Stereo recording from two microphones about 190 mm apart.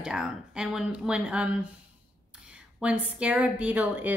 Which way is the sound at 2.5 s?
5° right (ahead or behind).